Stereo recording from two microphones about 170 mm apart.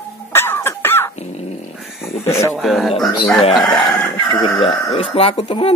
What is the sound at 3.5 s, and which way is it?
Speech, centre (ahead or behind).